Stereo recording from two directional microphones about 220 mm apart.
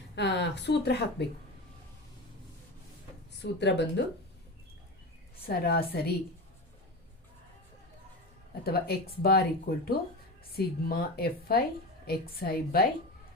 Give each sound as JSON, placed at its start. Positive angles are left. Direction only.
{"t": 0.2, "sound": "speech", "side_deg": 50}
{"t": 3.4, "sound": "speech", "side_deg": 50}
{"t": 5.5, "sound": "speech", "side_deg": 45}
{"t": 8.6, "sound": "speech", "side_deg": 45}